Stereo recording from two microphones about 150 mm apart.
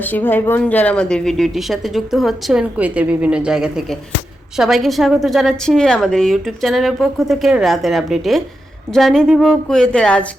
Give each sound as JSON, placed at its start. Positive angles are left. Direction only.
{"t": 0.0, "sound": "speech", "side_deg": 15}